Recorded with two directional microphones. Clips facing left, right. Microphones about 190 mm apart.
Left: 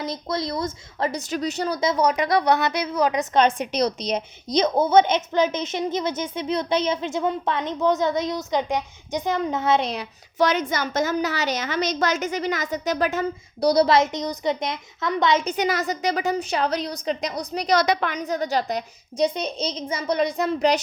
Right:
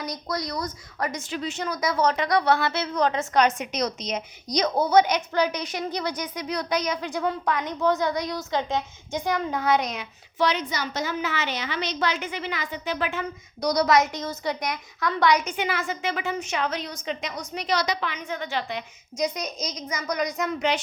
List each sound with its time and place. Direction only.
0.0 s a woman's voice: 25° left (ahead or behind)
1.2 s a woman's voice: 40° left (ahead or behind)
2.0 s a woman's voice: 10° left (ahead or behind)
3.3 s a woman's voice: 30° left (ahead or behind)
15.4 s a woman's voice: 40° left (ahead or behind)
18.2 s a woman's voice: 40° left (ahead or behind)